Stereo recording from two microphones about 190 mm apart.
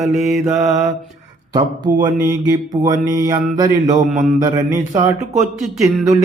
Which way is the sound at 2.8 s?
40° right (ahead or behind).